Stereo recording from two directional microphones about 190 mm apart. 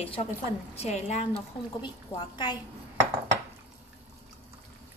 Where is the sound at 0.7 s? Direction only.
35° left (ahead or behind).